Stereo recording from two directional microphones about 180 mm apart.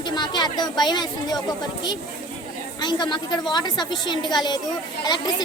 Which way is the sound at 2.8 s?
25° left (ahead or behind).